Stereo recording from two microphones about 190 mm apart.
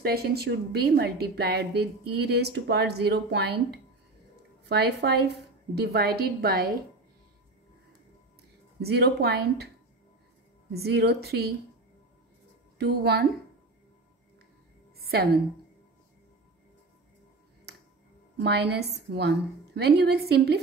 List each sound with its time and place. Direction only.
0.0 s a woman's voice: 55° right (ahead or behind)
8.8 s a woman's voice: 60° right (ahead or behind)
10.7 s a woman's voice: 60° right (ahead or behind)
12.7 s a woman's voice: 60° right (ahead or behind)
15.0 s a sound: 55° right (ahead or behind)
18.4 s a woman's voice: 60° right (ahead or behind)